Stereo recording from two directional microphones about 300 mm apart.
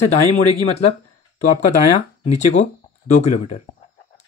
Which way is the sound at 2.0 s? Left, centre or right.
Left.